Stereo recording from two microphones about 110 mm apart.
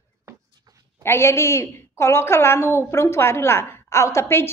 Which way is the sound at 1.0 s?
25° left (ahead or behind).